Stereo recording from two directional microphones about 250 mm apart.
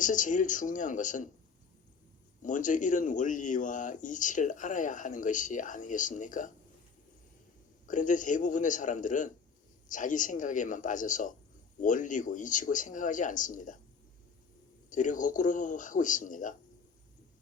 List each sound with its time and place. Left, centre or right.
0.0 s speech: left
2.4 s speech: left
7.9 s speech: left
14.8 s speech: left